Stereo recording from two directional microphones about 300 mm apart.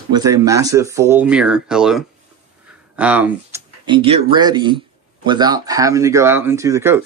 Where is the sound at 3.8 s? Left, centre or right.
Centre.